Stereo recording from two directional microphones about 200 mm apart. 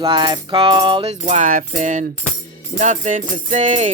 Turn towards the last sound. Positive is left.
turn(degrees=-40)  # may be behind; listen again after turning